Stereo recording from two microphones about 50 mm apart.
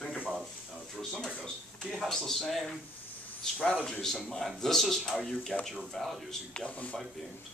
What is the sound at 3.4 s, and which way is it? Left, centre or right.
Speech, centre.